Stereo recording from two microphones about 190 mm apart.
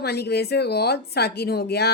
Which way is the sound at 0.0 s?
60° left (ahead or behind).